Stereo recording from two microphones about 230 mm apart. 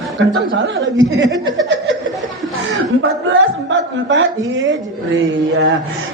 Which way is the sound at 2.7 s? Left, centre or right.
Right.